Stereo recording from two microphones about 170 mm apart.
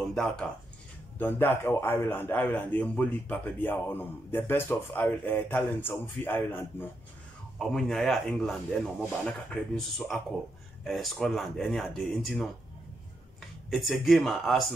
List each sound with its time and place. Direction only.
0.0 s a man's voice: 5° left (ahead or behind)
7.5 s speech: centre (ahead or behind)
13.7 s speech: centre (ahead or behind)